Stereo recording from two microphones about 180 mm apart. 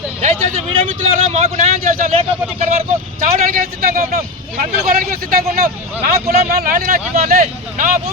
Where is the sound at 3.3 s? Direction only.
50° right (ahead or behind).